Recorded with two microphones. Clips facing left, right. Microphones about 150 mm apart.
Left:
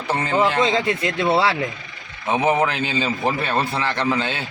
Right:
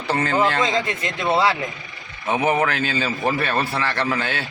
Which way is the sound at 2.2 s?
20° left (ahead or behind).